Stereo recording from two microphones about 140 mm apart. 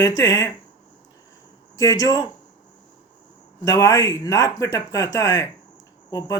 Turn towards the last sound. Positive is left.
turn(degrees=25)  # may be behind; listen again after turning